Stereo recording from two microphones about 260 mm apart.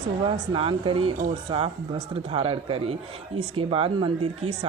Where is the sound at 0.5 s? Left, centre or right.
Centre.